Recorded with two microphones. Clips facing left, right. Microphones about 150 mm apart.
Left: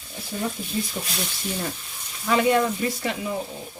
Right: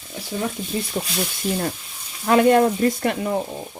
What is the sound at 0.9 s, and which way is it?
Speech, 60° right (ahead or behind).